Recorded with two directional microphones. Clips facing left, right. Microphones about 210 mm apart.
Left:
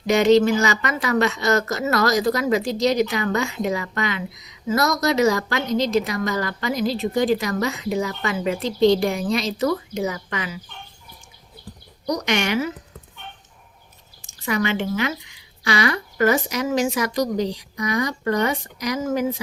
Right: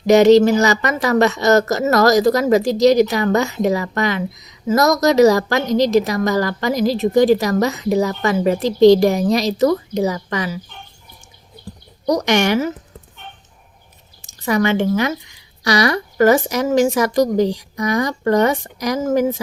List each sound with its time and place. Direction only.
0.1 s speech: 40° right (ahead or behind)
12.0 s speech: 45° right (ahead or behind)
14.3 s a sound: 40° right (ahead or behind)
15.6 s speech: 40° right (ahead or behind)